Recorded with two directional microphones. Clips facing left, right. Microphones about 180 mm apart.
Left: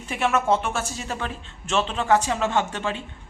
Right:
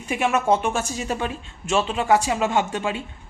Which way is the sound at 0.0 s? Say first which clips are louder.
Right 1 dB; 15° right (ahead or behind).